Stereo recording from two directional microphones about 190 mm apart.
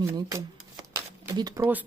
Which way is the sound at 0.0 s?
15° right (ahead or behind).